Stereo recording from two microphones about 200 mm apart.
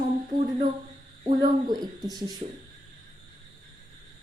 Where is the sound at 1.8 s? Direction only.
20° right (ahead or behind).